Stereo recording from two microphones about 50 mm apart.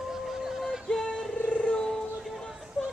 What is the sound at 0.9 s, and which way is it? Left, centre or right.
Music, centre.